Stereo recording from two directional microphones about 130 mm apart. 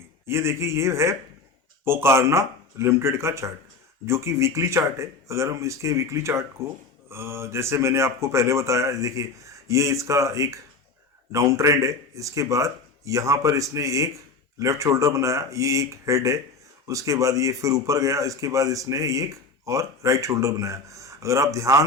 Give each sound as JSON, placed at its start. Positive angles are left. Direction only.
{"t": 0.3, "sound": "speech", "side_deg": -20}